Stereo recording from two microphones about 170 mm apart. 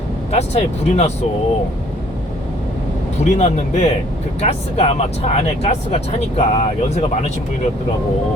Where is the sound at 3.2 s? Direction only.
40° left (ahead or behind).